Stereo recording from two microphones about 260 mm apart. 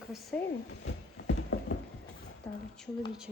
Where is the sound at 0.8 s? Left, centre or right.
Left.